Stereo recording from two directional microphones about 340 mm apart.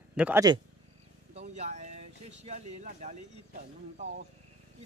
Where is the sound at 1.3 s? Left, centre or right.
Centre.